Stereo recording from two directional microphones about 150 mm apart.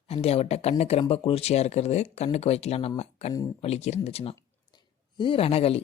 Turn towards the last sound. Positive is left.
turn(degrees=40)  # may be behind; listen again after turning